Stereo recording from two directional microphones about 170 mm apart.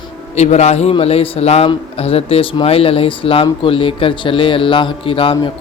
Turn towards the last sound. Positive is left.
turn(degrees=30)  # may be behind; listen again after turning